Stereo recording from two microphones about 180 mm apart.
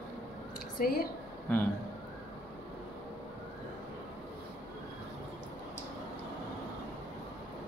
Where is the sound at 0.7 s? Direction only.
55° left (ahead or behind).